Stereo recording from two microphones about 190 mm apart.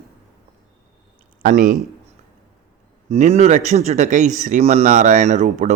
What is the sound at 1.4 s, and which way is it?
Speech, 40° right (ahead or behind).